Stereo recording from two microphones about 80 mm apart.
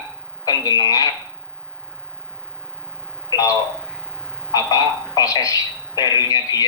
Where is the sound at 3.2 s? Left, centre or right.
Left.